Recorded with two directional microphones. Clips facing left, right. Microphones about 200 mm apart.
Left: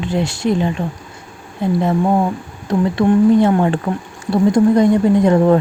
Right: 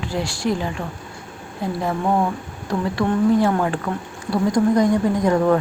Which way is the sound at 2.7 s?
20° left (ahead or behind).